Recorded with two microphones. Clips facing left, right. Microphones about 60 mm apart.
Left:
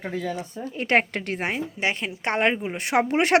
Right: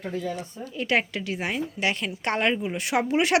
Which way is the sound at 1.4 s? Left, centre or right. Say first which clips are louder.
Even; left.